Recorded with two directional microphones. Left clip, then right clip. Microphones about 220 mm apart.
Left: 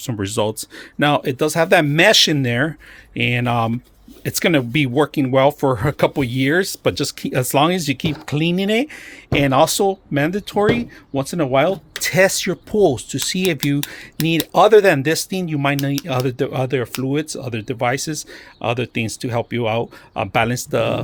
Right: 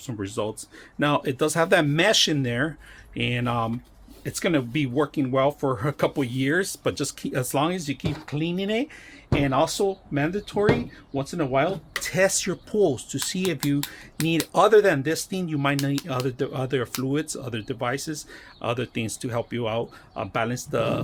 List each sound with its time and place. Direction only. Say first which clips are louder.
0.0 s speech: left 8 dB; 45° left (ahead or behind)